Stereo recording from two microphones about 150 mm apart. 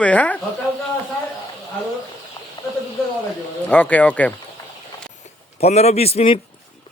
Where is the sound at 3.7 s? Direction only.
10° left (ahead or behind).